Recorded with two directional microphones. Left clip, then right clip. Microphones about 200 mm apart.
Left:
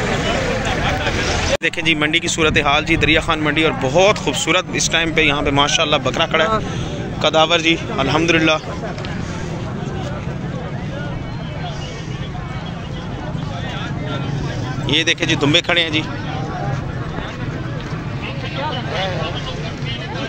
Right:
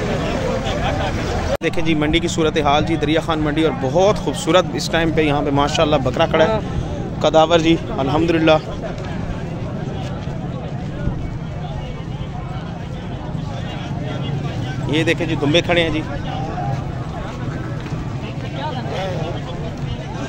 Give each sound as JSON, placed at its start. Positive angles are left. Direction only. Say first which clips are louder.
{"t": 1.6, "sound": "speech", "louder": "left 3 dB", "side_deg": -5}
{"t": 14.9, "sound": "speech", "louder": "left 3 dB", "side_deg": -10}